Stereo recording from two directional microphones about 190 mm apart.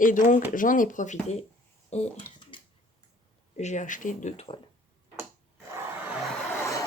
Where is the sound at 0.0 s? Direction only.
45° left (ahead or behind).